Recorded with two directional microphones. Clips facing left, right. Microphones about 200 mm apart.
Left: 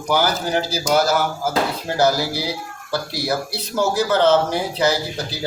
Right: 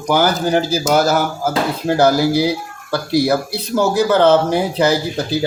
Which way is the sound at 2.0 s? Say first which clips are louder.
Right 5 dB; 55° right (ahead or behind).